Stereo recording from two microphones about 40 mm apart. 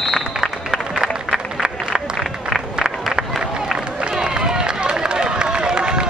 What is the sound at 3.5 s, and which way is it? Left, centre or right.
Run, centre.